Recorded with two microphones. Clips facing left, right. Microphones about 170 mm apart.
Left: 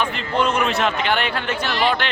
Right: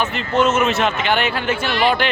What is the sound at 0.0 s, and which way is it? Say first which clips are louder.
Speech: right 3 dB; 5° right (ahead or behind).